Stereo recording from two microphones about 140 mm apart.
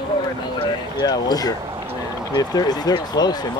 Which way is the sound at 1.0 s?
30° left (ahead or behind).